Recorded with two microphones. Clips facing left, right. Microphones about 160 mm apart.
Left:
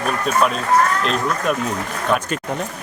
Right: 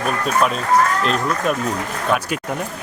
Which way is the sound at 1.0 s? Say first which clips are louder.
Right 1 dB; centre (ahead or behind).